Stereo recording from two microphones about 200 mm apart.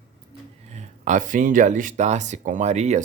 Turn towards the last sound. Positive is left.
turn(degrees=-35)  # may be behind; listen again after turning